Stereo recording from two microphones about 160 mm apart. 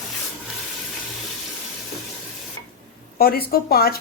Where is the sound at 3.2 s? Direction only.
70° left (ahead or behind).